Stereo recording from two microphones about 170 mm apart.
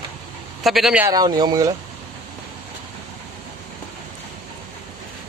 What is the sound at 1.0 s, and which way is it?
Speech, 20° right (ahead or behind).